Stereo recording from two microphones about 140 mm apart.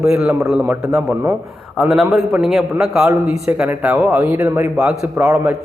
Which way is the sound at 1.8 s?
5° right (ahead or behind).